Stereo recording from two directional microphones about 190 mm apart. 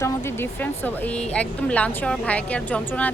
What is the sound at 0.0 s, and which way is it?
Speech, 10° left (ahead or behind).